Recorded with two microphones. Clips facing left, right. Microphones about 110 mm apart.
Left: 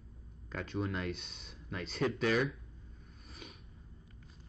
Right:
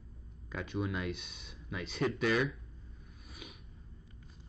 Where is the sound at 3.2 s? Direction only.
5° right (ahead or behind).